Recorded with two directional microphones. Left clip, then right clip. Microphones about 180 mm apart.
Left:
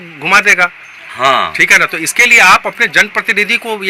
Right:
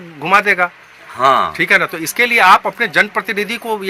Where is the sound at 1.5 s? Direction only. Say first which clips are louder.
Left 5 dB; 10° left (ahead or behind).